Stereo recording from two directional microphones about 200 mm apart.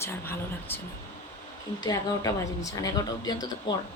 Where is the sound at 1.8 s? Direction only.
20° left (ahead or behind).